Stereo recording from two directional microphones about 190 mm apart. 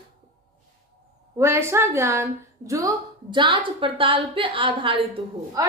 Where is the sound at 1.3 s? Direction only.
15° right (ahead or behind).